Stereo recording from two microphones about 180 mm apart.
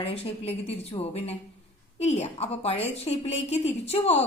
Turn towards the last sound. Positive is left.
turn(degrees=35)  # may be behind; listen again after turning